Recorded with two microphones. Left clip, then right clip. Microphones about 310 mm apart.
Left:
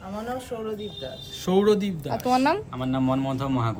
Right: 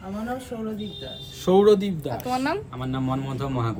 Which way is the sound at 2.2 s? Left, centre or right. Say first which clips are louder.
Left 5 dB; left.